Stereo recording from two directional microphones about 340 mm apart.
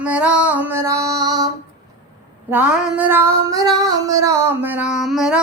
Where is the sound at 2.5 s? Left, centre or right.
Centre.